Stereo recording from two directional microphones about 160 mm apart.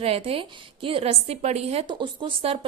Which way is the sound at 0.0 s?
35° right (ahead or behind).